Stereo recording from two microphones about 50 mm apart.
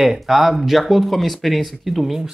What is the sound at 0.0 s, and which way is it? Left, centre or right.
Speech, centre.